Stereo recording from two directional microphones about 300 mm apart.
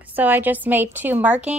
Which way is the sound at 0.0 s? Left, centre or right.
Centre.